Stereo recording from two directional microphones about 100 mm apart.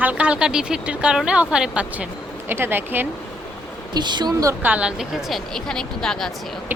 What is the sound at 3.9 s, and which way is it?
Speech, 45° right (ahead or behind).